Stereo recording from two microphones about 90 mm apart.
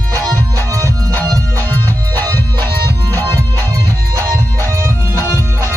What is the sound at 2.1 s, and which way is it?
Music, 20° left (ahead or behind).